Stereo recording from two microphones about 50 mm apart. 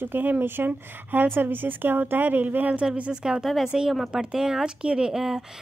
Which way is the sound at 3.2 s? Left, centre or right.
Centre.